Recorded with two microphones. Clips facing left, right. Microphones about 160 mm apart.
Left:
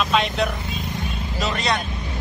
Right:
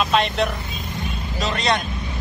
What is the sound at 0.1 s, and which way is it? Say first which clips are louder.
Speech: right 1 dB; centre (ahead or behind).